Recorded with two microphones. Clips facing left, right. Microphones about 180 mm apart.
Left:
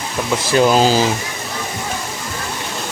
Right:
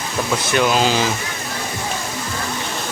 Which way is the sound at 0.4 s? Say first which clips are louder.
Left 5 dB; 30° left (ahead or behind).